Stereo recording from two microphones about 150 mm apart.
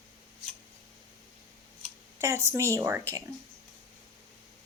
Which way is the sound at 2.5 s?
20° right (ahead or behind).